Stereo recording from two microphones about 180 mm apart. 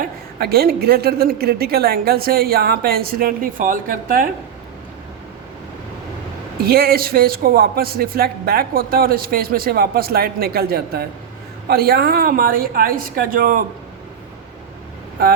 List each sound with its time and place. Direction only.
0.0 s speech: 60° right (ahead or behind)
6.7 s a woman's voice: 60° right (ahead or behind)